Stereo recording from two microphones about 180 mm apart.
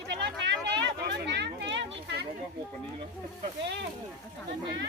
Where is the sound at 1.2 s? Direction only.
70° right (ahead or behind).